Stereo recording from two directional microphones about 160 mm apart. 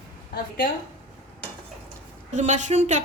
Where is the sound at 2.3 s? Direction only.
50° right (ahead or behind).